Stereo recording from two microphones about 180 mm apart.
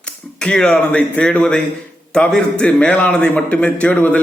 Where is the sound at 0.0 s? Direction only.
5° left (ahead or behind).